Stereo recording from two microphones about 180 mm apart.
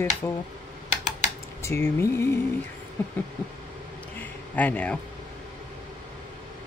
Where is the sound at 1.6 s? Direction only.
15° left (ahead or behind).